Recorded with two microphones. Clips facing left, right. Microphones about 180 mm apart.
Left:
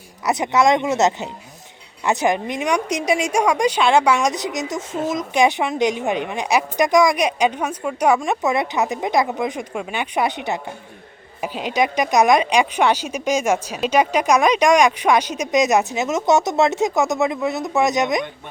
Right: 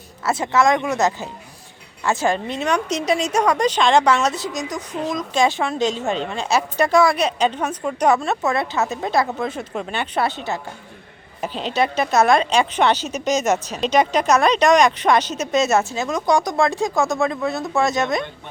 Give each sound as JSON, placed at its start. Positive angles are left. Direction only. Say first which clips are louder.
{"t": 0.3, "sound": "speech", "louder": "left 1 dB", "side_deg": 15}